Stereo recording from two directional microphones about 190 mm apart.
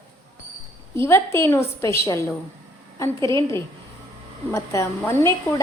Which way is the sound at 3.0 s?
15° left (ahead or behind).